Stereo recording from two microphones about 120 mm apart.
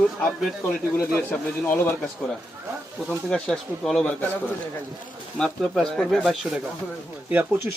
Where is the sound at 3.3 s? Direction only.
5° left (ahead or behind).